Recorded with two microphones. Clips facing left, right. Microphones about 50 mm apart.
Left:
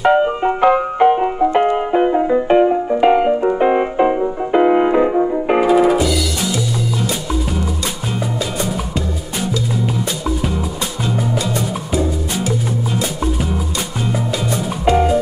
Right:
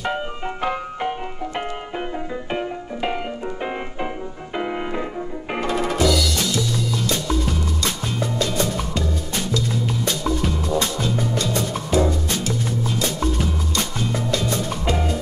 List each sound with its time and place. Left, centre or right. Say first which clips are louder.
0.0 s music: left 12 dB; left
5.6 s music: left 7 dB; centre
8.5 s music: left 2 dB; centre
11.3 s music: left 3 dB; centre
14.3 s music: left 3 dB; centre